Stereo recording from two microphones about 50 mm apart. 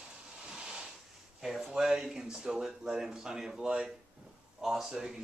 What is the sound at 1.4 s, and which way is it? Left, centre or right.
Speech, centre.